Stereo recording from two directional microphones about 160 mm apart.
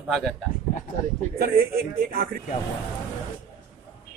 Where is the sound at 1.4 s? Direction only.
70° right (ahead or behind).